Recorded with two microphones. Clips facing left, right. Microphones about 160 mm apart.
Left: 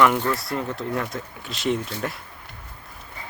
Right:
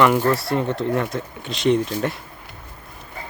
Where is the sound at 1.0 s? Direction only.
Centre (ahead or behind).